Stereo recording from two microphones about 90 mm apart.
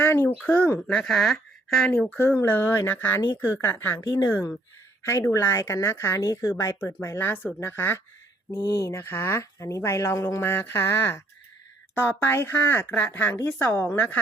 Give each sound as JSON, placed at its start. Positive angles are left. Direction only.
{"t": 0.0, "sound": "speech", "side_deg": 25}
{"t": 2.0, "sound": "speech", "side_deg": 25}
{"t": 3.9, "sound": "mantra", "side_deg": 45}
{"t": 4.3, "sound": "a woman's voice", "side_deg": 25}
{"t": 6.8, "sound": "speech", "side_deg": 30}
{"t": 8.5, "sound": "mantra", "side_deg": 45}
{"t": 9.0, "sound": "speech", "side_deg": 25}